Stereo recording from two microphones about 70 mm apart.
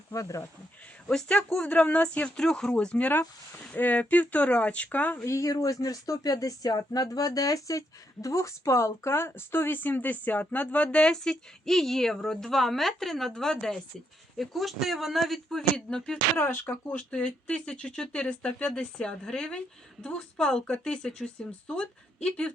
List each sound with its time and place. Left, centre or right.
0.1 s speech: left
1.0 s speech: centre
5.1 s speech: left; by 10.8 s centre
10.9 s speech: centre
16.4 s speech: left
17.1 s speech: centre